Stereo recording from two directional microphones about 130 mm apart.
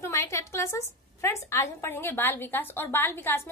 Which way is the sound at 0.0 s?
20° left (ahead or behind).